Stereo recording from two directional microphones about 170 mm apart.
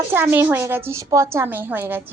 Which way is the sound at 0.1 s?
10° right (ahead or behind).